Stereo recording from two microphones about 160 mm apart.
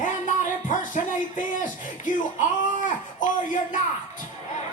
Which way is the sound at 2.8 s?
55° left (ahead or behind).